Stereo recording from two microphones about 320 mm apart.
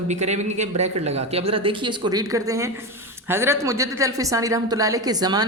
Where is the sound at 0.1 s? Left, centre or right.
Right.